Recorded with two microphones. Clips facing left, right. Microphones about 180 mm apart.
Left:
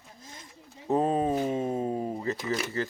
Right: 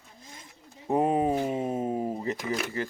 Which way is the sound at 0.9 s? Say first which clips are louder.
Right 1 dB; 15° right (ahead or behind).